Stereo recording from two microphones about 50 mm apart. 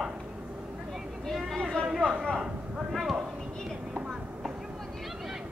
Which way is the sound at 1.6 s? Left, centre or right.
Centre.